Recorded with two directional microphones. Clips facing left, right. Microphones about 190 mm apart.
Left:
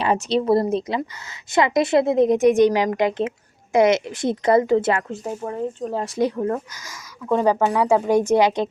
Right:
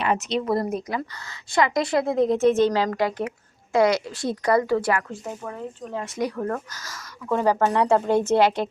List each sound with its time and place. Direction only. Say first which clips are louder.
0.0 s a woman's voice: left 4 dB; 30° left (ahead or behind)
6.3 s a woman's voice: left 4 dB; 20° left (ahead or behind)